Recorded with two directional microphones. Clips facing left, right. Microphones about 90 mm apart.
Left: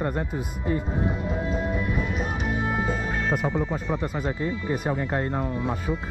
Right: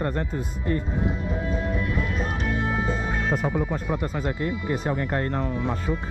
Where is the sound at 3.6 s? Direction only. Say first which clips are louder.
Even; 10° right (ahead or behind).